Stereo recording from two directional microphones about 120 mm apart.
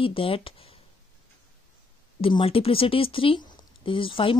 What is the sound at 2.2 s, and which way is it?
Speech, 50° left (ahead or behind).